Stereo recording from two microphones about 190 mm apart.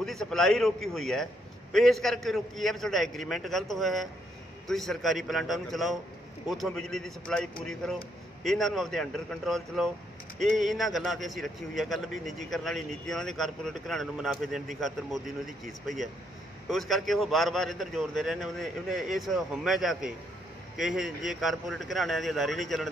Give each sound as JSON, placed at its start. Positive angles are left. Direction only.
{"t": 0.0, "sound": "speech", "side_deg": 0}
{"t": 8.5, "sound": "speech", "side_deg": 0}